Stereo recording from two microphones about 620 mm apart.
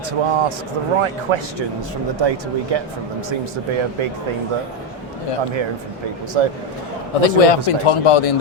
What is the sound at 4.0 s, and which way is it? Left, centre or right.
Speech, right.